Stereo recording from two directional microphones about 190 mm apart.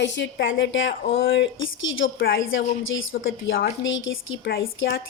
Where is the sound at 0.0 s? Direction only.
70° left (ahead or behind); by 4.5 s 90° left.